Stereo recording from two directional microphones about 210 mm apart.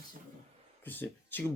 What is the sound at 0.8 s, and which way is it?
Speech, 10° left (ahead or behind).